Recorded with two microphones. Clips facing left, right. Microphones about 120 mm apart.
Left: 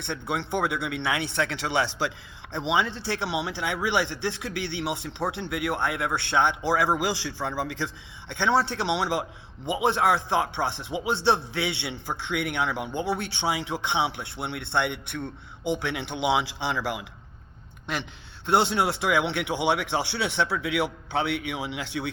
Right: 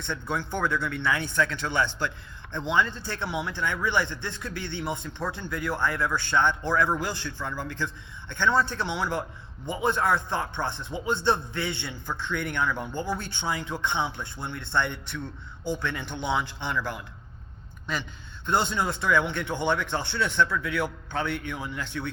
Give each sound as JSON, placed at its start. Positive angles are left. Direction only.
{"t": 0.0, "sound": "a man's voice", "side_deg": 65}
{"t": 6.7, "sound": "a man's voice", "side_deg": 75}
{"t": 8.3, "sound": "speech", "side_deg": 70}
{"t": 18.4, "sound": "speech", "side_deg": 75}